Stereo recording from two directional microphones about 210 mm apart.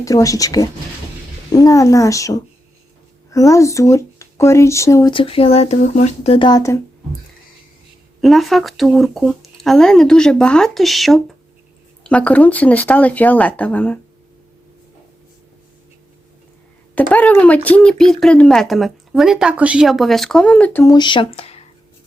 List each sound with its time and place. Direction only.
0.0 s speech: 15° left (ahead or behind)
3.5 s speech: 15° left (ahead or behind)
8.2 s speech: centre (ahead or behind)
16.9 s speech: 5° left (ahead or behind); by 21.6 s 30° left (ahead or behind)